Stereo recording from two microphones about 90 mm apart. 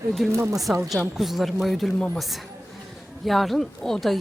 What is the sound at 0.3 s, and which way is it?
Speech, 35° right (ahead or behind).